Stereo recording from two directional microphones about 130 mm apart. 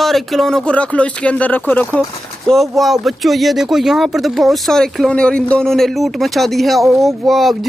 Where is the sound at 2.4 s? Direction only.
Centre (ahead or behind).